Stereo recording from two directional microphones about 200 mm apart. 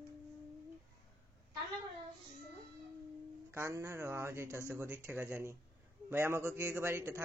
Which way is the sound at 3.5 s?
15° right (ahead or behind).